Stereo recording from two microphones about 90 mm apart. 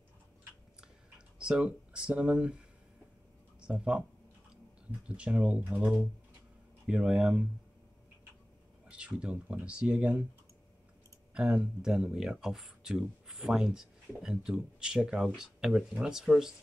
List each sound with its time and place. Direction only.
0.7 s a sound: 10° right (ahead or behind)
3.6 s speech: 10° right (ahead or behind)
5.0 s speech: 10° right (ahead or behind)
8.8 s speech: 10° right (ahead or behind)
11.3 s speech: 10° right (ahead or behind)